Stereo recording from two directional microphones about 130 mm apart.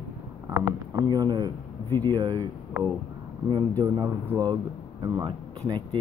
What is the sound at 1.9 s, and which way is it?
Speech, 20° left (ahead or behind).